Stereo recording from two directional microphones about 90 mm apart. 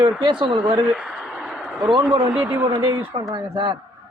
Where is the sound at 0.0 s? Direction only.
65° right (ahead or behind).